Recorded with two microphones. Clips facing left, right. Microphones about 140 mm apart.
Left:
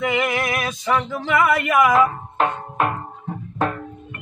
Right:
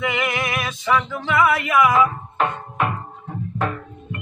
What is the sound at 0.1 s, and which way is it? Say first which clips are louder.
Male singing: left 2 dB; 40° left (ahead or behind).